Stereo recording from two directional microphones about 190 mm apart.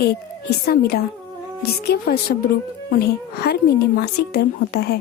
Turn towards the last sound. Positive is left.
turn(degrees=55)  # may be behind; listen again after turning